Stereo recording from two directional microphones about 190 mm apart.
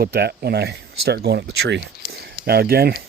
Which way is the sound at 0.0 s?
60° right (ahead or behind).